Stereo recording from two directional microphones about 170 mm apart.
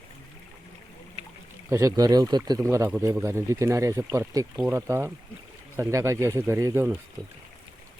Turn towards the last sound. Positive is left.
turn(degrees=-15)  # may be behind; listen again after turning